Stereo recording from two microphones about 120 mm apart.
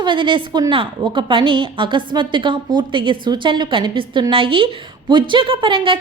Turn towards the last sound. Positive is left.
turn(degrees=-45)  # may be behind; listen again after turning